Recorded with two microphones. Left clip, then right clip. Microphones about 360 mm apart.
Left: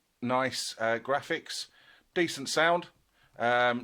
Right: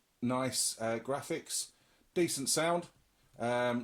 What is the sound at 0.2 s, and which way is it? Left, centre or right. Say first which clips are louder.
Speech: left 5 dB; left.